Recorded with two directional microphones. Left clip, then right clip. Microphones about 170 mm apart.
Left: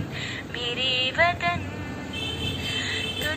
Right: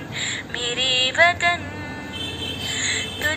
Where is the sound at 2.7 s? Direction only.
40° right (ahead or behind).